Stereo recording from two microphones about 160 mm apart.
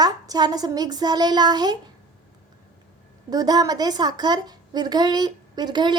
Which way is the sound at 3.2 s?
25° right (ahead or behind).